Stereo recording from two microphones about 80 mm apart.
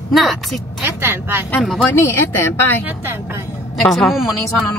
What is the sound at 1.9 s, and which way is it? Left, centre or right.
Speech, left.